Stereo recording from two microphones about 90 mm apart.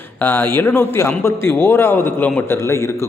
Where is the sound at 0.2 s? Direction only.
25° left (ahead or behind).